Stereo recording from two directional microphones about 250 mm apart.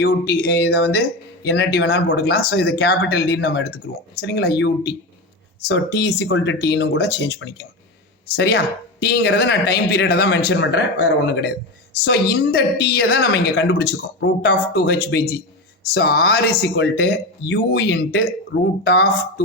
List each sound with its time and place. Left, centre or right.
0.0 s a woman's voice: left